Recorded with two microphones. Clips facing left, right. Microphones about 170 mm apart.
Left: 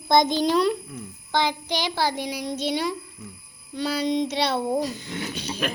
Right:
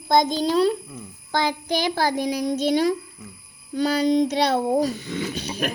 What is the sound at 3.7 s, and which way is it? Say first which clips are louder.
Child singing: right 5 dB; 35° right (ahead or behind).